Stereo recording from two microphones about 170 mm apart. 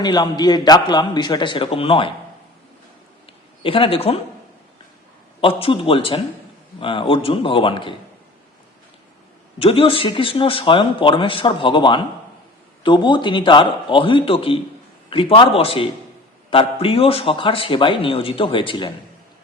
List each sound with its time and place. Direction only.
0.0 s a man's voice: 25° left (ahead or behind)
3.6 s speech: 30° left (ahead or behind)
5.4 s speech: 35° left (ahead or behind)
9.6 s a man's voice: 35° left (ahead or behind)